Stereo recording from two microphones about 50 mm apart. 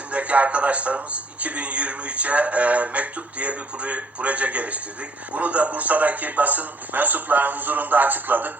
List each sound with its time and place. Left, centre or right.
0.1 s a man's voice: right